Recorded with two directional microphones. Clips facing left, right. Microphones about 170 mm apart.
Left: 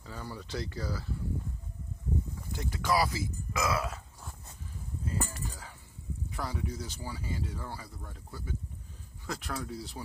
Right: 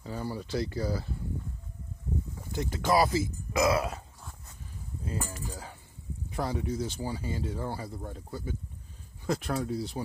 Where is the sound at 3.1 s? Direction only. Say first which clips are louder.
Right 7 dB; 35° right (ahead or behind).